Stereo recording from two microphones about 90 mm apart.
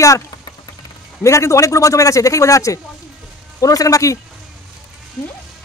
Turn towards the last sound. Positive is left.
turn(degrees=35)  # may be behind; listen again after turning